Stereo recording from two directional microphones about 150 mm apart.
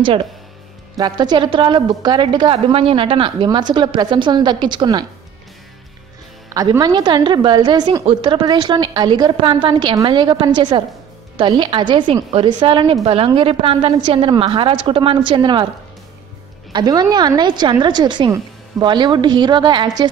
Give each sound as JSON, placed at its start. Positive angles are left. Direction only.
{"t": 0.9, "sound": "a woman's voice", "side_deg": -25}
{"t": 6.5, "sound": "a woman's voice", "side_deg": -25}
{"t": 16.7, "sound": "a woman's voice", "side_deg": -30}